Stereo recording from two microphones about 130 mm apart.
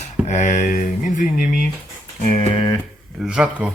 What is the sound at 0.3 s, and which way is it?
Speech, 70° left (ahead or behind).